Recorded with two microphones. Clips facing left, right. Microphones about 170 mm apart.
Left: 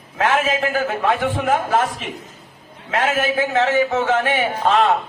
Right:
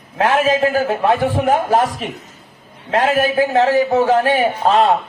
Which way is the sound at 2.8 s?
35° right (ahead or behind).